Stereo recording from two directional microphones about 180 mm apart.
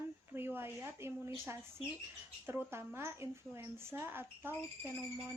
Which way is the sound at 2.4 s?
10° right (ahead or behind).